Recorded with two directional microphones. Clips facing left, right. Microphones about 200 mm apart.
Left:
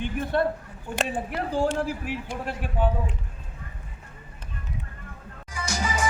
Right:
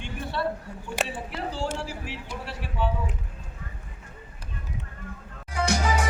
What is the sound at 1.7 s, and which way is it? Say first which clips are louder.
A man's voice: left 6 dB; 50° left (ahead or behind).